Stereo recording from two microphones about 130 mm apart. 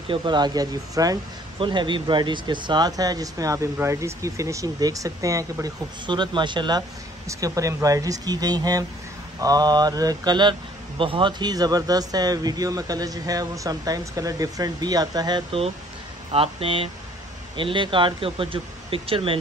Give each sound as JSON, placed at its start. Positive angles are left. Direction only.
{"t": 0.1, "sound": "speech", "side_deg": -35}
{"t": 7.2, "sound": "speech", "side_deg": -25}
{"t": 16.3, "sound": "speech", "side_deg": -45}